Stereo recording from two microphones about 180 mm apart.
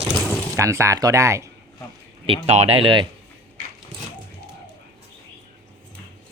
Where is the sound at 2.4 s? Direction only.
35° right (ahead or behind).